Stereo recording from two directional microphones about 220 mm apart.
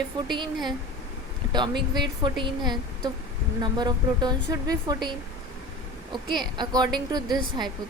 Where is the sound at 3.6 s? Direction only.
20° right (ahead or behind).